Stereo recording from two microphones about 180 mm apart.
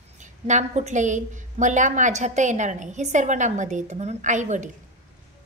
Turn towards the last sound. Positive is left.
turn(degrees=-40)  # may be behind; listen again after turning